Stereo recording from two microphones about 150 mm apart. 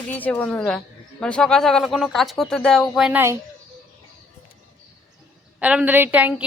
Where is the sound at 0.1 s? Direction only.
10° left (ahead or behind).